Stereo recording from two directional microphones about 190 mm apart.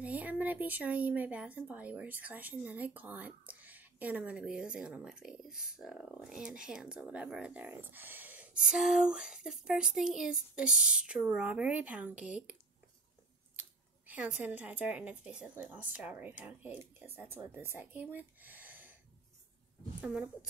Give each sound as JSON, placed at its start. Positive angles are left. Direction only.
{"t": 0.0, "sound": "speech", "side_deg": -10}
{"t": 13.6, "sound": "speech", "side_deg": -10}
{"t": 20.0, "sound": "speech", "side_deg": -5}